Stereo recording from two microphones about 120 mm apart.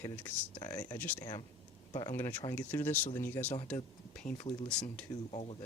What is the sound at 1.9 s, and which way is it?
Speech, 35° left (ahead or behind).